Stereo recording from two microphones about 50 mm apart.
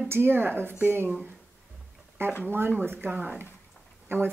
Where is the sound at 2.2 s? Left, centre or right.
Right.